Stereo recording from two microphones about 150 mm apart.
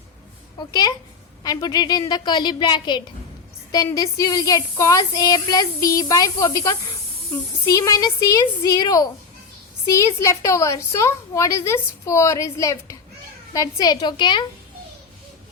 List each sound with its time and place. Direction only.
0.7 s a woman's voice: 25° left (ahead or behind)